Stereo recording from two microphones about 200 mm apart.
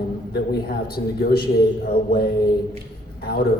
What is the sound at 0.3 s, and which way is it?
A man's voice, 50° left (ahead or behind).